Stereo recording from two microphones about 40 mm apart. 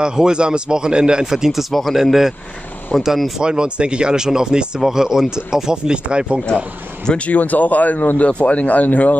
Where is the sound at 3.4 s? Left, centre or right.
Right.